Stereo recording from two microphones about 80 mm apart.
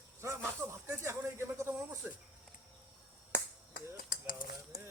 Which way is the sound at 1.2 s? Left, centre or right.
Right.